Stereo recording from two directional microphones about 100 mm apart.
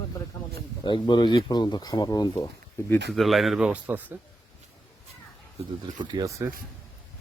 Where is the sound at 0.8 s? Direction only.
50° left (ahead or behind).